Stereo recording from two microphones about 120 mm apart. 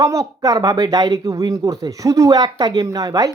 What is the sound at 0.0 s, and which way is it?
Speech, 30° right (ahead or behind).